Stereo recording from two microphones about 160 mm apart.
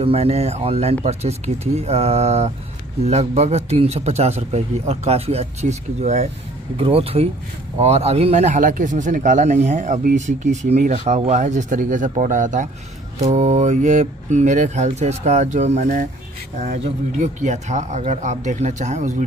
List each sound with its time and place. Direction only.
0.0 s a man's voice: 40° right (ahead or behind)